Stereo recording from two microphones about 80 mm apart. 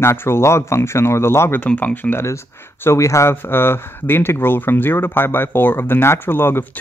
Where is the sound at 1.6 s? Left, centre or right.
Centre.